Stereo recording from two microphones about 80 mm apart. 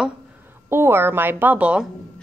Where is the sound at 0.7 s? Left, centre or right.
Right; by 1.9 s centre.